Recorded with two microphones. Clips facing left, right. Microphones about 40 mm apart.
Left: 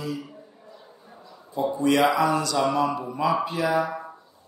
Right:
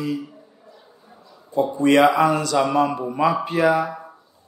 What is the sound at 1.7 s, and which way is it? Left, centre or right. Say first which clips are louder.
A man's voice: right 5 dB; right.